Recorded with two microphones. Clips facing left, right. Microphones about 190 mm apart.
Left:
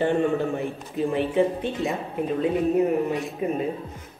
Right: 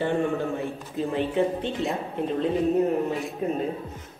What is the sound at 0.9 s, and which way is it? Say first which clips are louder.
Speech: left 3 dB; 15° left (ahead or behind).